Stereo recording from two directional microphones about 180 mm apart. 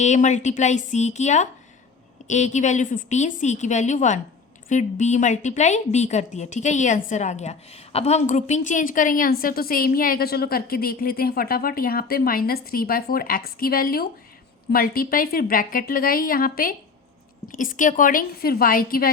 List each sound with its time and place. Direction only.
0.0 s a woman's voice: 40° left (ahead or behind)